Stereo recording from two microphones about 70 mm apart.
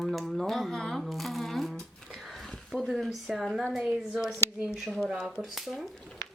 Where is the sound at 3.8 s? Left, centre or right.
Centre.